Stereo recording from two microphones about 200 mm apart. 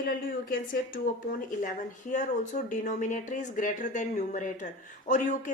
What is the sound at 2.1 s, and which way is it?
Speech, 35° left (ahead or behind).